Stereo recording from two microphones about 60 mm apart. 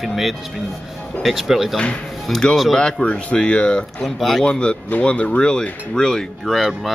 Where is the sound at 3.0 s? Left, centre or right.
Centre.